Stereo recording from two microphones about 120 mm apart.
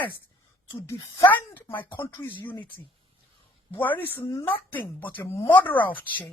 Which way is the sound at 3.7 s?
15° left (ahead or behind).